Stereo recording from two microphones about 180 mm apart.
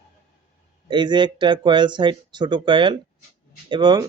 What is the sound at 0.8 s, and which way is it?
Speech, 25° right (ahead or behind).